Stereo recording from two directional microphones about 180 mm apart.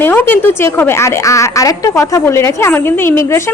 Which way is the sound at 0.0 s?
10° left (ahead or behind).